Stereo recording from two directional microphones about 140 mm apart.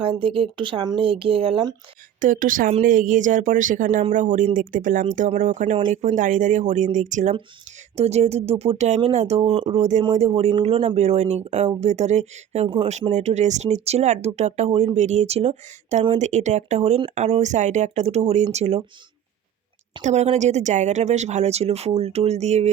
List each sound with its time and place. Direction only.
0.0 s speech: 40° right (ahead or behind)
2.2 s speech: 75° right (ahead or behind)
7.9 s speech: 50° right (ahead or behind)
20.0 s speech: 55° right (ahead or behind)